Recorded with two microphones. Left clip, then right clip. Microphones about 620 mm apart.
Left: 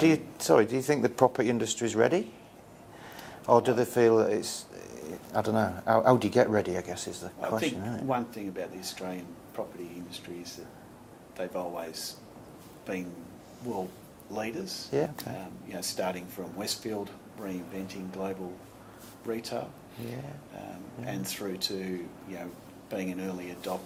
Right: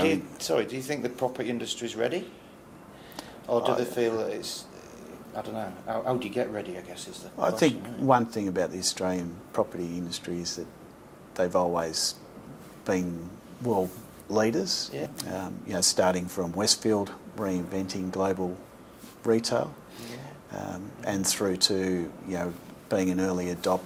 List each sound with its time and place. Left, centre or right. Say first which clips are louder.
0.0 s speech: left 1 dB; left
3.4 s speech: left 2 dB; left
7.3 s a man's voice: right 7 dB; right
14.3 s speech: right 10 dB; right